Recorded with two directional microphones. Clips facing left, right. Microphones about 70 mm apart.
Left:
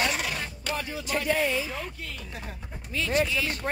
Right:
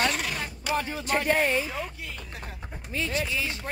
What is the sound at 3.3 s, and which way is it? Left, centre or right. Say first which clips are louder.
Speech: left 1 dB; right.